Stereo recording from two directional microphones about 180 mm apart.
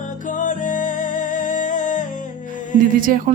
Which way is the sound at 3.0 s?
50° right (ahead or behind).